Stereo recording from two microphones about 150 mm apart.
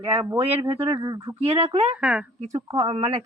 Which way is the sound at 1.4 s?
40° right (ahead or behind).